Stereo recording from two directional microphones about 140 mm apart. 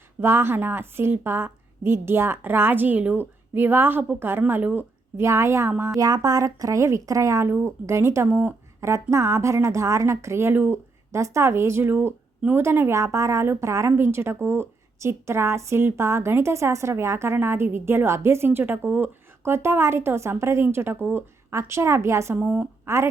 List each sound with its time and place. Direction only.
0.2 s a woman's voice: 15° right (ahead or behind)
22.4 s a woman's voice: 10° right (ahead or behind)